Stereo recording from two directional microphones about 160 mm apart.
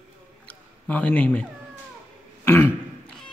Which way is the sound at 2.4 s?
15° left (ahead or behind).